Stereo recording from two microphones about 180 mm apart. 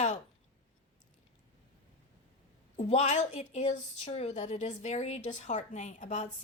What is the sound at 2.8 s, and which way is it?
Speech, 40° left (ahead or behind).